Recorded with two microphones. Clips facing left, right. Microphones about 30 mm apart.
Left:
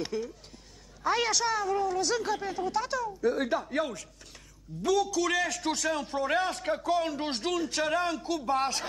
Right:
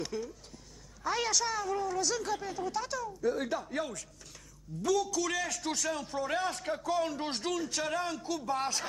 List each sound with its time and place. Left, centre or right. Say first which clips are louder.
0.1 s a man's voice: left 4 dB; centre